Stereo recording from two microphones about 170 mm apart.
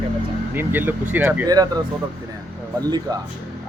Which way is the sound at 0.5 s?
10° right (ahead or behind).